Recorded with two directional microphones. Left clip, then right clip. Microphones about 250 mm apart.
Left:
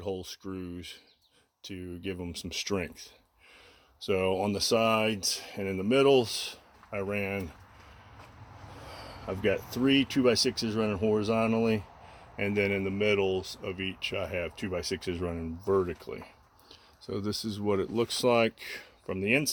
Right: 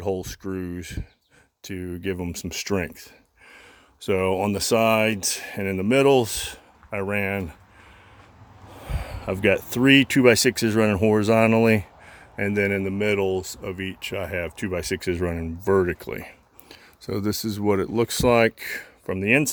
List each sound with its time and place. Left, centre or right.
0.0 s speech: right
4.0 s speech: right
8.9 s a sound: right
9.8 s speech: right
12.4 s speech: right